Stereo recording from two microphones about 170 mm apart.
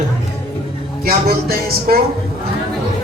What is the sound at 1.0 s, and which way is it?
Speech, 60° right (ahead or behind).